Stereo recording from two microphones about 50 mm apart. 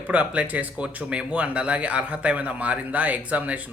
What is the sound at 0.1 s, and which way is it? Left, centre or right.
A man's voice, right.